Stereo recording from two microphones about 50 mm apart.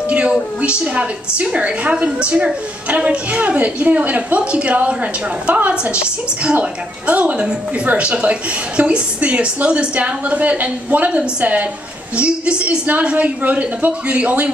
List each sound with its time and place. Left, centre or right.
0.1 s a woman's voice: right
12.2 s a woman's voice: right